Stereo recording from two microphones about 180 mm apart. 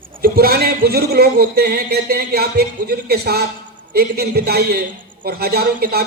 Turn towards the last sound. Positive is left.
turn(degrees=-60)  # may be behind; listen again after turning